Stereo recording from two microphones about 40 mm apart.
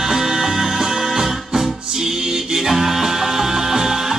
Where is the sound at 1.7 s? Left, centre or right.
Centre.